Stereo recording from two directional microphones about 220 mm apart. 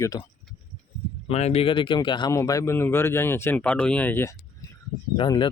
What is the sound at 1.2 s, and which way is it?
A man's voice, 30° left (ahead or behind).